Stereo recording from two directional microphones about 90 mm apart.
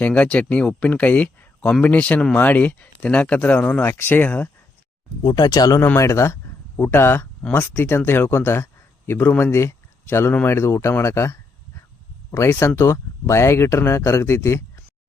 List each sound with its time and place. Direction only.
0.0 s speech: 15° left (ahead or behind)
5.2 s speech: 50° left (ahead or behind)
5.8 s a man's voice: 30° left (ahead or behind)